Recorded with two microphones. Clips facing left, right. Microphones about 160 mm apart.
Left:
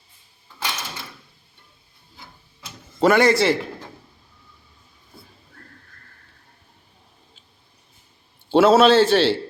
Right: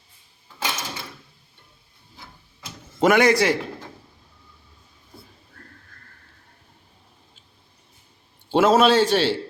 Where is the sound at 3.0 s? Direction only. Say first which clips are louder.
Left 1 dB; 15° right (ahead or behind).